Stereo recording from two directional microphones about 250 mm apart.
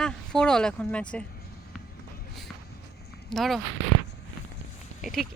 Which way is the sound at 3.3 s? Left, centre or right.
Centre.